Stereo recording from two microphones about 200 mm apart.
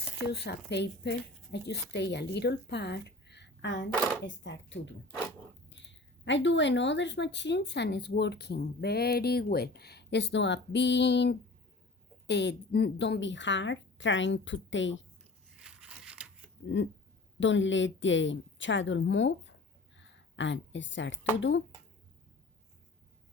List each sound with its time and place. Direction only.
0.3 s a woman's voice: 55° left (ahead or behind)
3.9 s speech: 5° left (ahead or behind)
4.3 s speech: 65° left (ahead or behind)
15.4 s a sound: 5° right (ahead or behind)
16.6 s a woman's voice: 65° left (ahead or behind)
20.0 s a sound: 65° left (ahead or behind)